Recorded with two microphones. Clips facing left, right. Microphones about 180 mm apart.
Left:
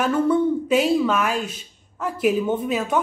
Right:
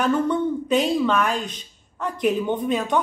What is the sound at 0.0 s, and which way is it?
A woman's voice, 5° left (ahead or behind).